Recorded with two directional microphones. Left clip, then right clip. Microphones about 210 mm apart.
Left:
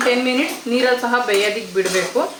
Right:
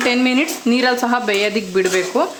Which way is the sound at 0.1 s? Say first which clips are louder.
Right 1 dB; 55° right (ahead or behind).